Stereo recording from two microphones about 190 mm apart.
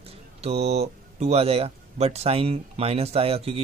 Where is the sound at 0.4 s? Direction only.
35° right (ahead or behind).